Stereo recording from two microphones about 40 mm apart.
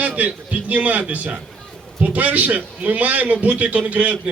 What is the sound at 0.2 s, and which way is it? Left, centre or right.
A man's voice, right.